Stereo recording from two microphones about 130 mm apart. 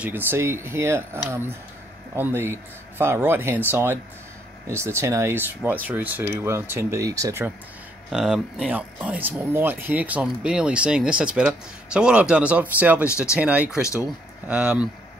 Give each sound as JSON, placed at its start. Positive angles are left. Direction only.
{"t": 0.0, "sound": "speech", "side_deg": -15}
{"t": 8.1, "sound": "speech", "side_deg": -5}